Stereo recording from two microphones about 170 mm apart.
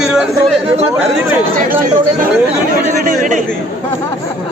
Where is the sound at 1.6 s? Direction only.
55° right (ahead or behind).